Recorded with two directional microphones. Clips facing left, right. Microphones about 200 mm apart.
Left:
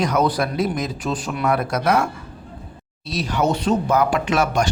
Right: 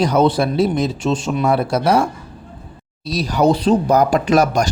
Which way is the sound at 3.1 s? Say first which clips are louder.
Right 5 dB; 35° right (ahead or behind).